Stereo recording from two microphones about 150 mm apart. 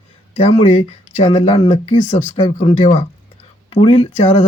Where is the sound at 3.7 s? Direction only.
35° left (ahead or behind).